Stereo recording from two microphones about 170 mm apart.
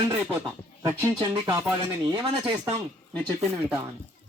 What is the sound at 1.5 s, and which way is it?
Speech, 10° right (ahead or behind).